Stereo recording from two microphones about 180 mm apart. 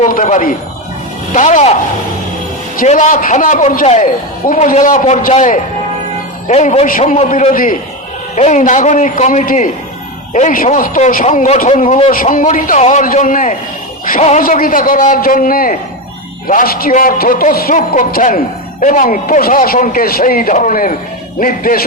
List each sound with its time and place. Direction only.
0.0 s a man's voice: 45° left (ahead or behind)
2.7 s a man's voice: 45° left (ahead or behind)
6.8 s a man's voice: 50° left (ahead or behind)